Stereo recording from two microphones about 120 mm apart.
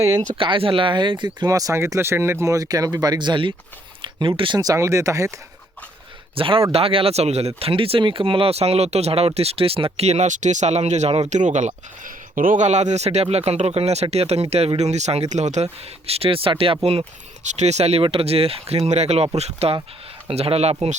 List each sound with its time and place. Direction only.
0.3 s speech: 45° right (ahead or behind)
4.6 s speech: 25° right (ahead or behind)
6.3 s speech: 45° right (ahead or behind); by 11.2 s 70° right (ahead or behind)
11.3 s speech: 90° right; by 17.5 s 55° right (ahead or behind)
17.5 s speech: 70° right (ahead or behind)
18.0 s speech: 50° right (ahead or behind)